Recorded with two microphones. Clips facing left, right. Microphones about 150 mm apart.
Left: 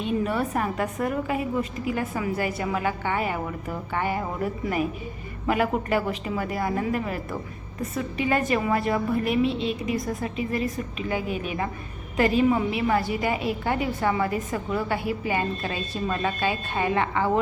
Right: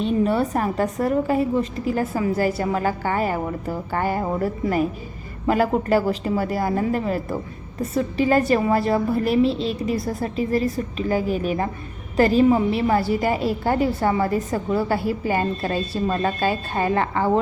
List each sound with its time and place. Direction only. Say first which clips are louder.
0.0 s a woman's voice: right 5 dB; 30° right (ahead or behind)
5.5 s a woman's voice: right 5 dB; 35° right (ahead or behind)